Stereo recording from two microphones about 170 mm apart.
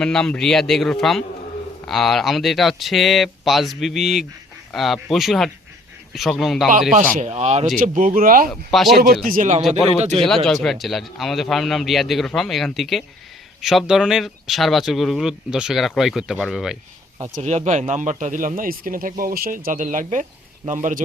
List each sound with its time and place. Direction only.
0.0 s speech: 5° left (ahead or behind)
7.2 s speech: 40° right (ahead or behind)
7.8 s speech: 50° right (ahead or behind)
8.4 s speech: centre (ahead or behind)
9.2 s speech: 50° right (ahead or behind)
10.2 s speech: centre (ahead or behind)
17.3 s speech: 45° right (ahead or behind)